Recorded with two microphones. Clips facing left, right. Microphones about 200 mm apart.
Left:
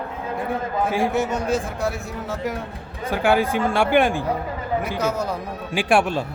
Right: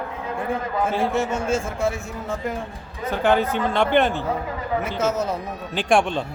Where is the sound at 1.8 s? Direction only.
Centre (ahead or behind).